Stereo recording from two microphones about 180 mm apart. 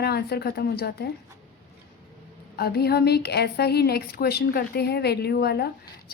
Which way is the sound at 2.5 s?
60° left (ahead or behind).